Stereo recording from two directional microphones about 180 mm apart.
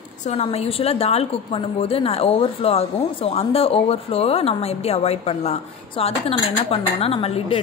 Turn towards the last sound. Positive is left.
turn(degrees=30)  # may be behind; listen again after turning